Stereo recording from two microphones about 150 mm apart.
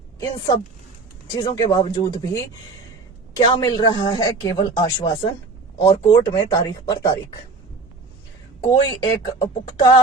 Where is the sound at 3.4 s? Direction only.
30° left (ahead or behind).